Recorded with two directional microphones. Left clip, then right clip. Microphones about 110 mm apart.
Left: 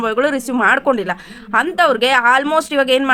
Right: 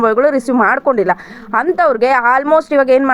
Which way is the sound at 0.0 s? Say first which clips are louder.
Right 5 dB; 45° left (ahead or behind).